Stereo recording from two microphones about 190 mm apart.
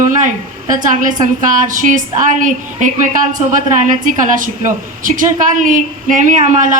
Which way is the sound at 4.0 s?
45° right (ahead or behind).